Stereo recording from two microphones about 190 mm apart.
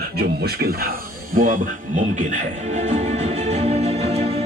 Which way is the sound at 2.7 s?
40° right (ahead or behind).